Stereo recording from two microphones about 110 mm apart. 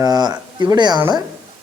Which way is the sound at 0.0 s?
35° right (ahead or behind).